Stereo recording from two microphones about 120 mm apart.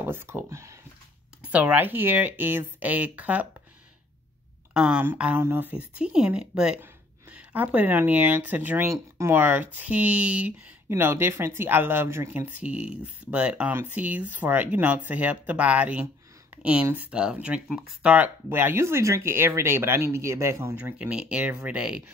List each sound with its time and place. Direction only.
0.0 s speech: 20° right (ahead or behind)
1.4 s speech: 10° right (ahead or behind)
4.7 s speech: 5° right (ahead or behind); by 20.7 s 25° right (ahead or behind)
20.7 s speech: 10° right (ahead or behind)